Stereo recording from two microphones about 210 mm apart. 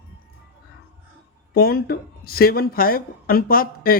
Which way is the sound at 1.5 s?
45° left (ahead or behind).